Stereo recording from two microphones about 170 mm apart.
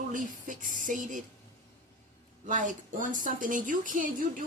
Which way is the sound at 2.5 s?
50° right (ahead or behind).